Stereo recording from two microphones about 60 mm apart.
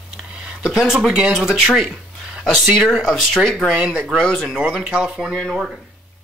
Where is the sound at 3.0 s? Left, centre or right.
Centre.